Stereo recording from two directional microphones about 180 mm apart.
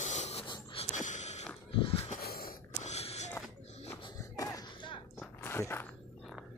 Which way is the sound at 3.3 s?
10° left (ahead or behind).